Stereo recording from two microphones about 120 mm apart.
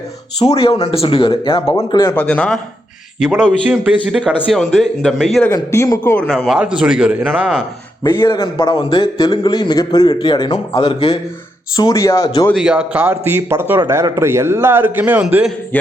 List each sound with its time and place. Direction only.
0.3 s speech: 55° left (ahead or behind)
2.0 s a man's voice: 10° left (ahead or behind)
3.2 s a man's voice: 5° right (ahead or behind)
5.5 s a man's voice: 25° left (ahead or behind)
6.1 s a man's voice: 5° left (ahead or behind)
8.0 s a man's voice: 40° left (ahead or behind)
11.8 s a man's voice: 30° left (ahead or behind)
12.5 s a man's voice: 10° right (ahead or behind)
13.7 s a man's voice: 30° right (ahead or behind); by 15.5 s 10° right (ahead or behind)
15.7 s a sound: 15° left (ahead or behind)